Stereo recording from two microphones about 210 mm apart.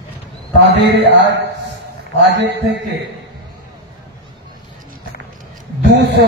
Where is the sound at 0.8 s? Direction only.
60° right (ahead or behind).